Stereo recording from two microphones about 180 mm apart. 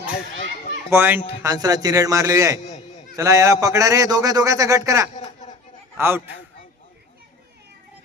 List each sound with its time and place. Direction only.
0.9 s a man's voice: 10° right (ahead or behind)
5.1 s a sound: 45° left (ahead or behind)
6.0 s a man's voice: 10° right (ahead or behind)